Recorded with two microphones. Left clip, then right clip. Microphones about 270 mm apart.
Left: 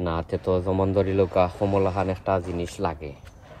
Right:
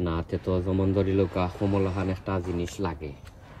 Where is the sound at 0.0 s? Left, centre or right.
Centre.